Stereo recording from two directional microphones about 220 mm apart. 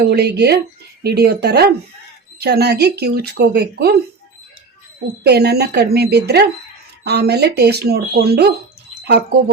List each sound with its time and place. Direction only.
0.1 s speech: 45° right (ahead or behind)
5.2 s speech: 45° right (ahead or behind)